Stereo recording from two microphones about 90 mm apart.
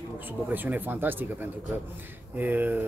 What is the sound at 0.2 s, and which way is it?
Speech, 20° right (ahead or behind).